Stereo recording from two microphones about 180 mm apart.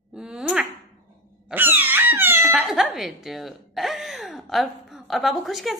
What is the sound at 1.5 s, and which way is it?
Cat, 10° right (ahead or behind).